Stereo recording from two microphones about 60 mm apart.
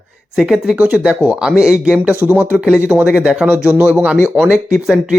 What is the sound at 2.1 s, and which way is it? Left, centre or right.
Speech, right.